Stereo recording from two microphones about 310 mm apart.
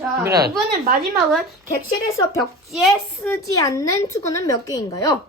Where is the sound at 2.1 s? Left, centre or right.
Centre.